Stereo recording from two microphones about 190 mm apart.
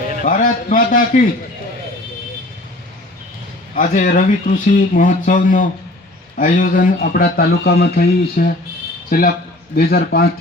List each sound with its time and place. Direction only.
0.2 s speech: 45° left (ahead or behind)
3.8 s a man's voice: 45° left (ahead or behind)